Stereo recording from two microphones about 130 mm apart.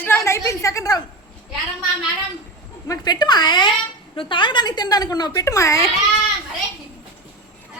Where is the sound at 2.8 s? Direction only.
30° left (ahead or behind).